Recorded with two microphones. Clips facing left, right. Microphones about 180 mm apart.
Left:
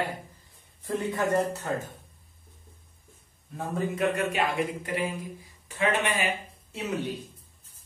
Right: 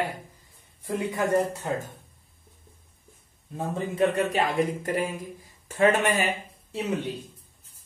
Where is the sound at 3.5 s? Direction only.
30° right (ahead or behind); by 6.2 s 45° right (ahead or behind).